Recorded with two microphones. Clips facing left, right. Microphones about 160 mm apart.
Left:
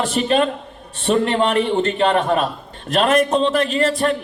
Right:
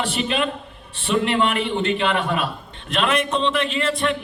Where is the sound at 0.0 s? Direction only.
40° left (ahead or behind).